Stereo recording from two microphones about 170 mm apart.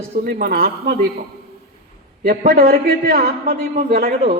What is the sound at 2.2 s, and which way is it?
A man's voice, 60° right (ahead or behind).